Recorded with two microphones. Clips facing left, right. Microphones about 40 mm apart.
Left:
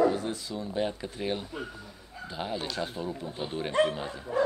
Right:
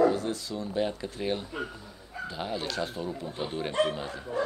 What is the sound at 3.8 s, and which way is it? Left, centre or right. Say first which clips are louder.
Speech: left 1 dB; centre.